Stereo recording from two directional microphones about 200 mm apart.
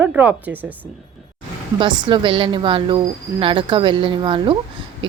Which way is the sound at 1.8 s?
25° right (ahead or behind).